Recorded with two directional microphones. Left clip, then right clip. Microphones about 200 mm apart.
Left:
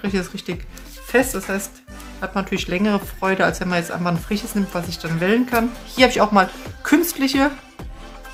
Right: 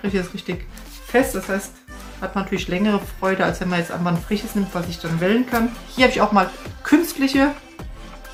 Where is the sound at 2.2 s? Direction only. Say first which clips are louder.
Left 1 dB; 45° left (ahead or behind).